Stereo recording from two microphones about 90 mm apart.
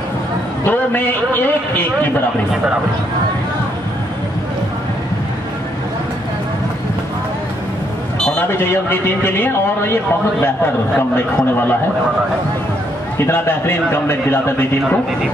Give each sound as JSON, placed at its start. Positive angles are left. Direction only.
{"t": 0.7, "sound": "a man's voice", "side_deg": 20}
{"t": 8.4, "sound": "a man's voice", "side_deg": 25}
{"t": 11.0, "sound": "a man's voice", "side_deg": 25}
{"t": 13.3, "sound": "a man's voice", "side_deg": 25}